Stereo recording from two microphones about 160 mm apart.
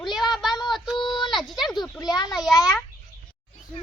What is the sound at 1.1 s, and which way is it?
Speech, 30° left (ahead or behind).